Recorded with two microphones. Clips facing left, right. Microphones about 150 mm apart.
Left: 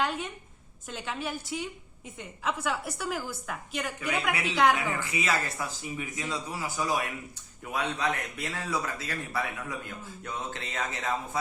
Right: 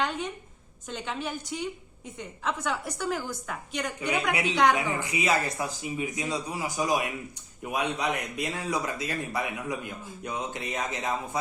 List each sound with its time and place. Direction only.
0.0 s a woman's voice: 5° left (ahead or behind)
4.8 s a man's voice: 20° right (ahead or behind)